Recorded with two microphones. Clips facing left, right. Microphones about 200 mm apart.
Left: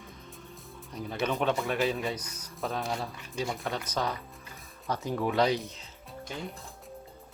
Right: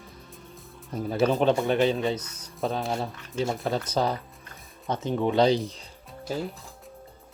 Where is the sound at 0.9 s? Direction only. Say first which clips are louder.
Right 7 dB; 45° right (ahead or behind).